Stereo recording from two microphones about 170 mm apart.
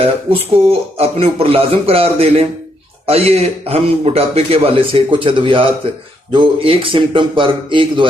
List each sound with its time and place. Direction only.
0.0 s a man's voice: 35° right (ahead or behind)